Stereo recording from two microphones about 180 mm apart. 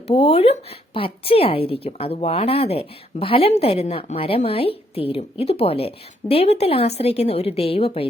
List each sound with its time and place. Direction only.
0.1 s a woman's voice: 35° left (ahead or behind)